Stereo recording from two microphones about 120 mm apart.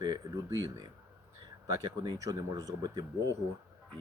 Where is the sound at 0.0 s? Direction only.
35° right (ahead or behind).